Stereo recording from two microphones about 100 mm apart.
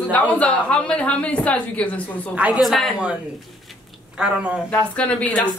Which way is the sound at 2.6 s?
Centre (ahead or behind).